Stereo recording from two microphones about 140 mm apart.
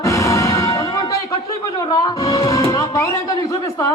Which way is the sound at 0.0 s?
25° left (ahead or behind).